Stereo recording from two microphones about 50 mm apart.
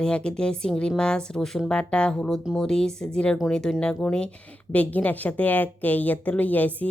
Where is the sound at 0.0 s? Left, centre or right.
Centre.